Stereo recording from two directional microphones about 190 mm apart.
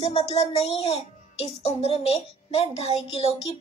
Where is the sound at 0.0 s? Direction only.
35° left (ahead or behind).